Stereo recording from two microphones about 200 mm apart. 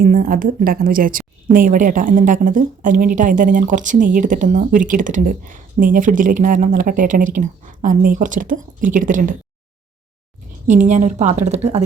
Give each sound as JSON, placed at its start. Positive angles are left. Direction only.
{"t": 0.0, "sound": "a woman's voice", "side_deg": -45}
{"t": 10.7, "sound": "a woman's voice", "side_deg": -35}